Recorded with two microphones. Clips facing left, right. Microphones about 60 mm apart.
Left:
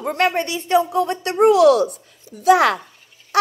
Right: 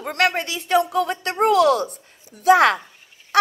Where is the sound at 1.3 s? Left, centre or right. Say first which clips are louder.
Left 4 dB; right.